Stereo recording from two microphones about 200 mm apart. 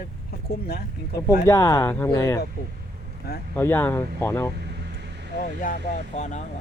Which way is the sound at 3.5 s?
10° left (ahead or behind).